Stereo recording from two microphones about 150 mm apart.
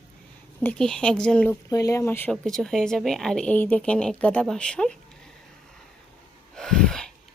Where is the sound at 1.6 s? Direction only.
25° left (ahead or behind).